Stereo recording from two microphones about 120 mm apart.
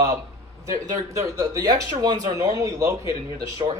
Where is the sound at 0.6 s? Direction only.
25° right (ahead or behind).